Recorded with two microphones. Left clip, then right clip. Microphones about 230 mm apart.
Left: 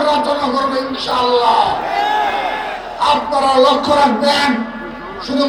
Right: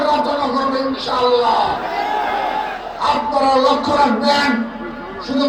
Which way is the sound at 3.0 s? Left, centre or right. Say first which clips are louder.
Left 2 dB; left.